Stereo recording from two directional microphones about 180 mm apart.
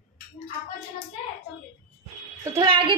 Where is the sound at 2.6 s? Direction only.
30° right (ahead or behind).